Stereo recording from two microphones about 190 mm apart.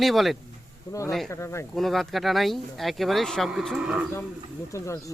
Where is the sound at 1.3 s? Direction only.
15° left (ahead or behind).